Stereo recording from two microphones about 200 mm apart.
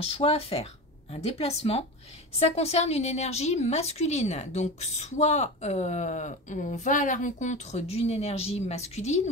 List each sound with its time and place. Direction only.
0.0 s a woman's voice: 30° left (ahead or behind)